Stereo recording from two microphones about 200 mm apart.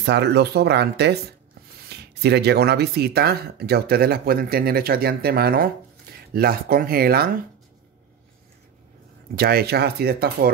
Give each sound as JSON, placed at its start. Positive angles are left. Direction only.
{"t": 0.0, "sound": "speech", "side_deg": -55}
{"t": 9.4, "sound": "speech", "side_deg": -50}